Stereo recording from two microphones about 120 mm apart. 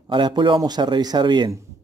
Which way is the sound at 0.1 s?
40° right (ahead or behind).